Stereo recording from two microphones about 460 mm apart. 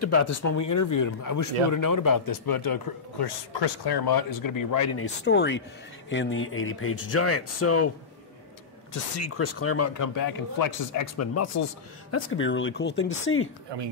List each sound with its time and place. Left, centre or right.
0.0 s speech: left
5.2 s speech: left
8.9 s speech: left